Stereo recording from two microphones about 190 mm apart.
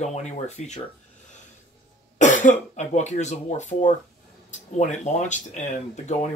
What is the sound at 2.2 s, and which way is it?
Speech, 40° left (ahead or behind).